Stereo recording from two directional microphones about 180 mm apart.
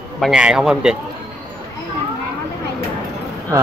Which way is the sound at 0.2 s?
5° right (ahead or behind).